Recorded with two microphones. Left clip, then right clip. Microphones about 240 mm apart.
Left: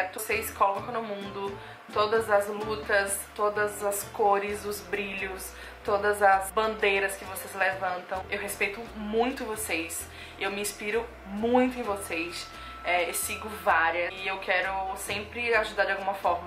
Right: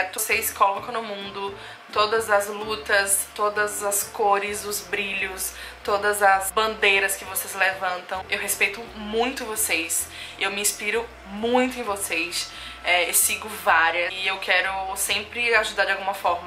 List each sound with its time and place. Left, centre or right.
0.0 s a woman's voice: centre
2.1 s a woman's voice: centre
2.6 s a woman's voice: centre
3.6 s a woman's voice: centre
4.3 s a woman's voice: centre